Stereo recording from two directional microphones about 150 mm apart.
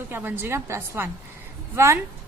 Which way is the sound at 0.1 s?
15° right (ahead or behind).